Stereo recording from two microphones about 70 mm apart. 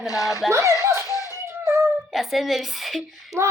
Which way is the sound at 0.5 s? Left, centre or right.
Right.